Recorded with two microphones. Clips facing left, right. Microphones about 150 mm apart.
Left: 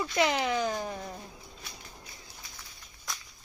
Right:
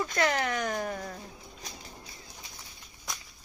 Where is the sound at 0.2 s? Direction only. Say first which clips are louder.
Left 2 dB; 15° left (ahead or behind).